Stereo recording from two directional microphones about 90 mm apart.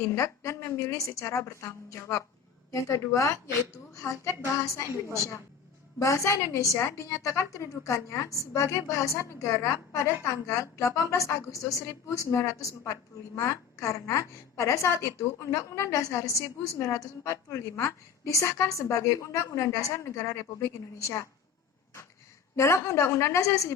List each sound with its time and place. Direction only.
0.2 s a woman's voice: 30° left (ahead or behind)
6.0 s a woman's voice: 35° left (ahead or behind)
22.5 s a woman's voice: 30° left (ahead or behind)